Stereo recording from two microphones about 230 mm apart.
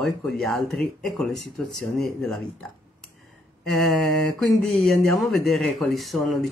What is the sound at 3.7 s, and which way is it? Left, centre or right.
Speech, centre.